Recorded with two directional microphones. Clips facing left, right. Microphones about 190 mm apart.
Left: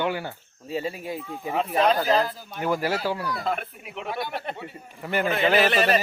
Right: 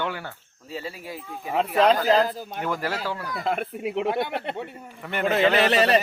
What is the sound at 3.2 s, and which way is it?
Speech, 50° right (ahead or behind).